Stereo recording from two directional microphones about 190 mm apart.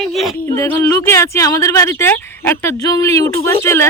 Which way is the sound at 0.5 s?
15° left (ahead or behind).